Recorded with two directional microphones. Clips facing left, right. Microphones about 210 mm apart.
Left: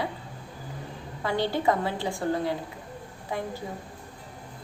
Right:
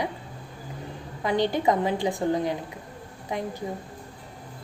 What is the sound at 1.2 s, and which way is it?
A woman's voice, 15° right (ahead or behind).